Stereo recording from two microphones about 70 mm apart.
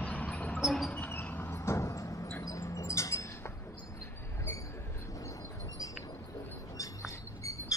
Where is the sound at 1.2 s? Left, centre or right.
Left.